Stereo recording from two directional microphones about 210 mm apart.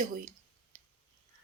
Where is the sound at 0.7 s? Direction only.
35° right (ahead or behind).